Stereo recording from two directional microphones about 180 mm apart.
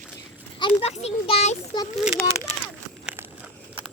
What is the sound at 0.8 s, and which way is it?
Speech, 35° left (ahead or behind).